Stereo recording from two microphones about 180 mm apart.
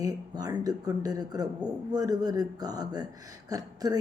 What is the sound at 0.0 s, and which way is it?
Speech, 20° right (ahead or behind).